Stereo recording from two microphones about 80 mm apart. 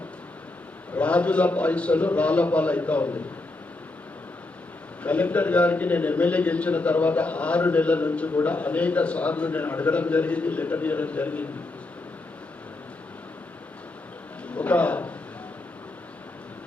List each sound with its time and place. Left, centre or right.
0.9 s a man's voice: centre
5.0 s a man's voice: centre
14.4 s a sound: centre